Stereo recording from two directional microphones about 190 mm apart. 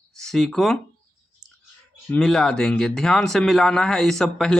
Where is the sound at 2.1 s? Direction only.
5° left (ahead or behind).